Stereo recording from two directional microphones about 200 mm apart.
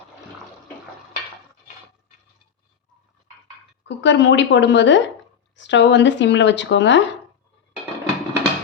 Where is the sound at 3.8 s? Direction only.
65° left (ahead or behind).